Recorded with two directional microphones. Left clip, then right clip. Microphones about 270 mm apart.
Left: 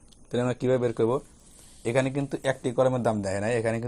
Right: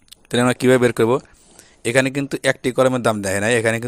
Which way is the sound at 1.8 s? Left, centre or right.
Right.